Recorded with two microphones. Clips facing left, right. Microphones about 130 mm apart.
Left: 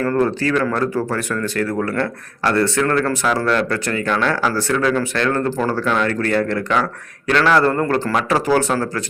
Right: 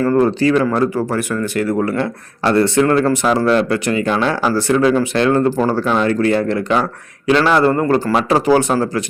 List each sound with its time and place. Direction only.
0.0 s speech: 15° right (ahead or behind)